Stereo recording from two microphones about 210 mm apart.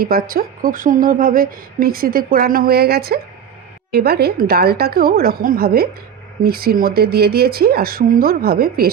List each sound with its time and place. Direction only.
0.0 s speech: 45° right (ahead or behind)